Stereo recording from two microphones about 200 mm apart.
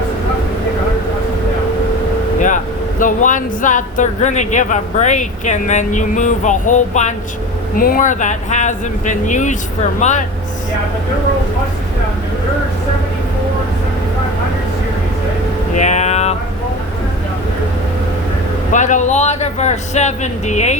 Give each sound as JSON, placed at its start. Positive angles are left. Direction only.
{"t": 3.0, "sound": "speech", "side_deg": 40}
{"t": 15.8, "sound": "speech", "side_deg": 35}
{"t": 18.7, "sound": "speech", "side_deg": 40}